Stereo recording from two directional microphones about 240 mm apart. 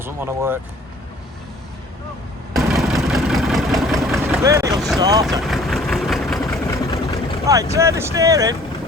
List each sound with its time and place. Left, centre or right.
0.0 s speech: centre
2.6 s vehicle: centre
4.4 s speech: centre
4.7 s vehicle: centre
4.9 s speech: centre
5.2 s vehicle: centre
6.5 s vehicle: centre
7.4 s speech: centre